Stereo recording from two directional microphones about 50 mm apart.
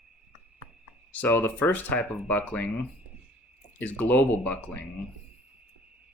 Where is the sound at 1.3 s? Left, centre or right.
Left.